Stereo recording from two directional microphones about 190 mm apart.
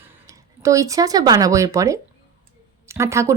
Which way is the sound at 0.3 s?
15° right (ahead or behind).